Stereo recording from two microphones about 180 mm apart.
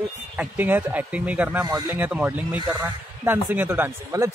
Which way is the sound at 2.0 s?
10° right (ahead or behind).